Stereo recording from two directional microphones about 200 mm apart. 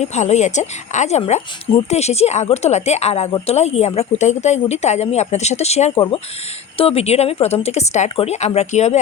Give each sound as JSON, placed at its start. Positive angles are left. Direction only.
{"t": 0.0, "sound": "speech", "side_deg": 35}